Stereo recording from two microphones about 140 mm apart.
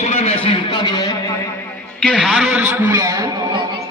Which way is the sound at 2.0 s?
Centre (ahead or behind).